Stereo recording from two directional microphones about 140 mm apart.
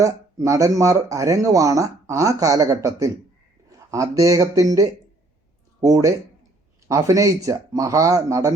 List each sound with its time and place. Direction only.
0.0 s speech: 25° right (ahead or behind)